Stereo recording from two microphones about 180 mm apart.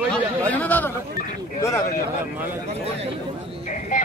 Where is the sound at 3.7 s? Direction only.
45° left (ahead or behind).